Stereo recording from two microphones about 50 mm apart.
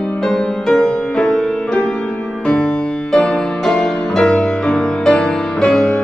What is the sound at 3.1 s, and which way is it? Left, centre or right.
Music, centre.